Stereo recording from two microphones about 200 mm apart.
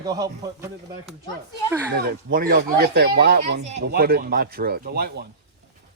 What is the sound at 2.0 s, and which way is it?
Speech, 50° right (ahead or behind).